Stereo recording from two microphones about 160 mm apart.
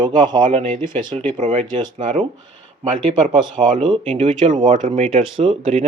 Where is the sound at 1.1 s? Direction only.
40° right (ahead or behind).